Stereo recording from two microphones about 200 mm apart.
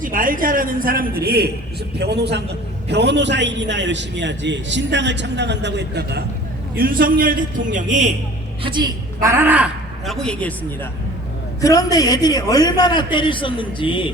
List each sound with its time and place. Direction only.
0.0 s a woman's voice: 45° right (ahead or behind)
8.6 s a woman's voice: 20° right (ahead or behind)
10.1 s speech: 5° left (ahead or behind)
11.6 s a man's voice: 15° left (ahead or behind)